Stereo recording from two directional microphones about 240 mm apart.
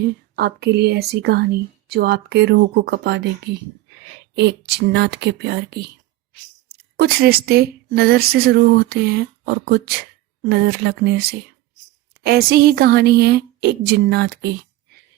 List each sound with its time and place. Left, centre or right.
0.0 s speech: right
4.4 s speech: right
6.9 s a woman's voice: right
10.4 s a woman's voice: right